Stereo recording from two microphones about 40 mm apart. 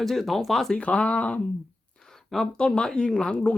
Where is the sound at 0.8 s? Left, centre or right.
Left.